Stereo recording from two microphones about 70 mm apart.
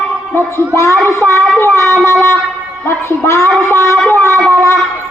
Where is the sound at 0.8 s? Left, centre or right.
Left.